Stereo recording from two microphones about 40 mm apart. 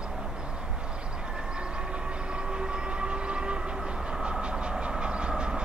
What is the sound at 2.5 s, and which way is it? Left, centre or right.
Train, right.